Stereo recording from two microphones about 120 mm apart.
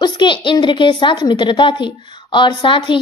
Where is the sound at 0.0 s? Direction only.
40° left (ahead or behind).